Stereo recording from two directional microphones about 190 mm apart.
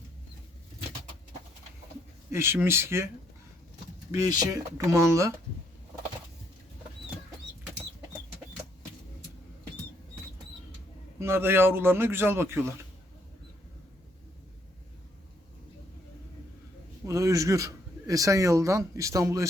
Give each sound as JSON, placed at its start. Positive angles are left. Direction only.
{"t": 2.3, "sound": "a man's voice", "side_deg": -15}
{"t": 4.1, "sound": "a man's voice", "side_deg": -20}
{"t": 11.2, "sound": "a man's voice", "side_deg": -10}
{"t": 17.1, "sound": "a man's voice", "side_deg": -15}